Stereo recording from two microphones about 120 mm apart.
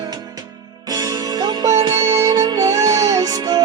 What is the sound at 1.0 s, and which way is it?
Music, 35° right (ahead or behind).